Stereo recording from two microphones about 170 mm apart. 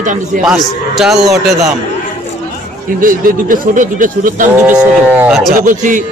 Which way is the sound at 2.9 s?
55° right (ahead or behind).